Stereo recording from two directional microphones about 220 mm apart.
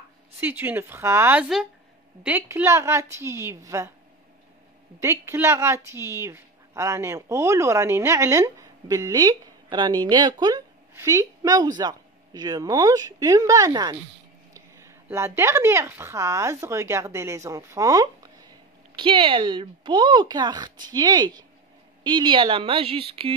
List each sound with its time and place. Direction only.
0.4 s a woman's voice: 10° right (ahead or behind)
5.0 s a woman's voice: 10° right (ahead or behind)